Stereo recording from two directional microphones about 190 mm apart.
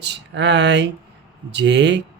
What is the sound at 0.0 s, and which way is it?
Speech, 65° right (ahead or behind).